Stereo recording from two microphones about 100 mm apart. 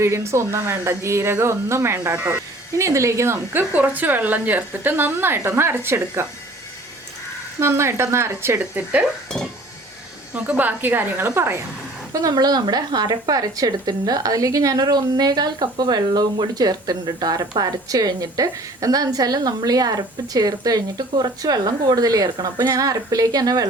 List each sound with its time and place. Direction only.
0.0 s speech: 25° right (ahead or behind)
7.6 s speech: 25° right (ahead or behind)
10.3 s a woman's voice: 15° right (ahead or behind)
12.1 s a woman's voice: 40° right (ahead or behind)